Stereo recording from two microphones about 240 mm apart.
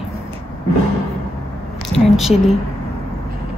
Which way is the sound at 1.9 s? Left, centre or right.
Centre.